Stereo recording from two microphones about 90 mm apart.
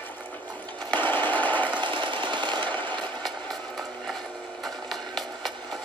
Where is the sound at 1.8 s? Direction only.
65° right (ahead or behind).